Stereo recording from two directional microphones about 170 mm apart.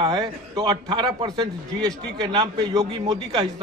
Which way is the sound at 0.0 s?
25° right (ahead or behind).